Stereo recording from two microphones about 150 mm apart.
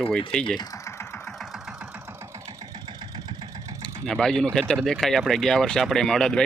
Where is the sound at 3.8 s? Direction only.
5° left (ahead or behind).